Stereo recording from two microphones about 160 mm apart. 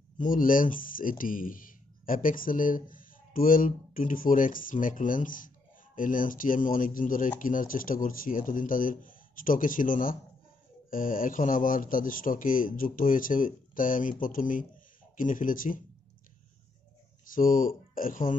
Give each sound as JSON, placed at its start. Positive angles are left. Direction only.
{"t": 0.2, "sound": "speech", "side_deg": 60}
{"t": 17.3, "sound": "speech", "side_deg": 60}